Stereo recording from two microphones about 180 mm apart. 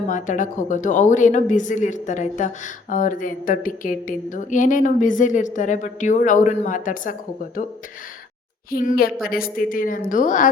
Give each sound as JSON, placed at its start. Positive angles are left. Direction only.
{"t": 0.1, "sound": "speech", "side_deg": 45}
{"t": 8.7, "sound": "speech", "side_deg": 50}